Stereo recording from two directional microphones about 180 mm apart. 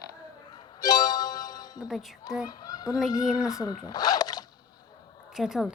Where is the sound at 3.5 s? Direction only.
20° left (ahead or behind).